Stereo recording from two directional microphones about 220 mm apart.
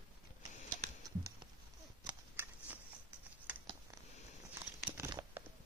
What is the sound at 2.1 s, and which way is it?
Scissors, 5° right (ahead or behind).